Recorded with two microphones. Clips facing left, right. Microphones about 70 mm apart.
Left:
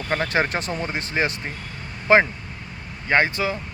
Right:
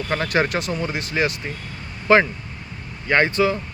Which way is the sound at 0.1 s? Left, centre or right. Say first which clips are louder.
Right 1 dB; left.